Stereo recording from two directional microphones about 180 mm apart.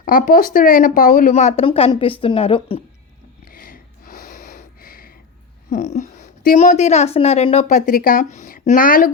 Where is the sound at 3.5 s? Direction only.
55° left (ahead or behind).